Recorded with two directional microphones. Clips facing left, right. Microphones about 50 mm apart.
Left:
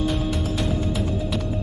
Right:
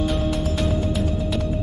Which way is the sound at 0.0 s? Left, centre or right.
Centre.